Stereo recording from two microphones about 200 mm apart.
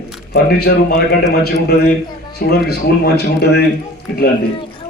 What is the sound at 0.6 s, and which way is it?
A man's voice, 55° left (ahead or behind).